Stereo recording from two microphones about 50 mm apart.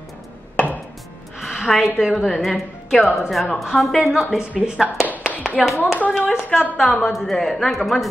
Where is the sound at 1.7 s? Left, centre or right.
Centre.